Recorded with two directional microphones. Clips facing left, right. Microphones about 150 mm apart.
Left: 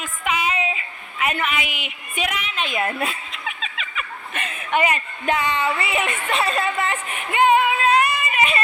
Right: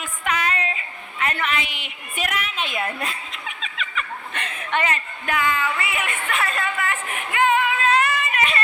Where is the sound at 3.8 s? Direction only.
5° left (ahead or behind).